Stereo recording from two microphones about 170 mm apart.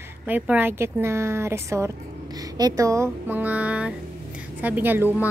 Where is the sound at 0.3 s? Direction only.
10° right (ahead or behind).